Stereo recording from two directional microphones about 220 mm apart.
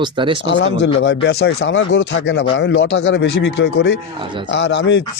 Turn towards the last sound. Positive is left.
turn(degrees=55)  # may be behind; listen again after turning